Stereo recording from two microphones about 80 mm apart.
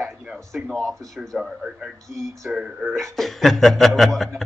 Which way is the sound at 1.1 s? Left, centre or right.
Centre.